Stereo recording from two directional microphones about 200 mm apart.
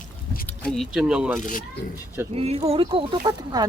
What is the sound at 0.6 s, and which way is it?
Speech, centre (ahead or behind).